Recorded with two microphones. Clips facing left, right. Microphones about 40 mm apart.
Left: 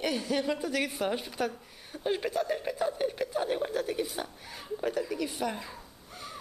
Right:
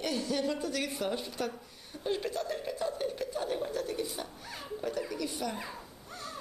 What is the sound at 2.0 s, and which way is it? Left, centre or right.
Speech, left.